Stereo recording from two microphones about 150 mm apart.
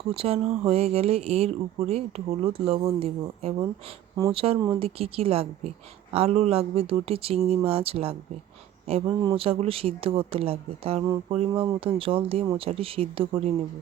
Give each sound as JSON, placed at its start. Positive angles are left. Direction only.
{"t": 0.1, "sound": "speech", "side_deg": -40}